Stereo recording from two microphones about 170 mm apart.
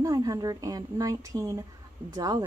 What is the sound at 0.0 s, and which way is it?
A woman's voice, 20° right (ahead or behind).